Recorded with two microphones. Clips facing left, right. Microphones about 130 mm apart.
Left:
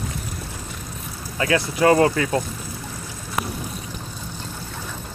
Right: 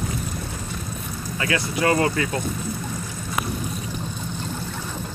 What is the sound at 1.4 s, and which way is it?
Speech, 25° left (ahead or behind).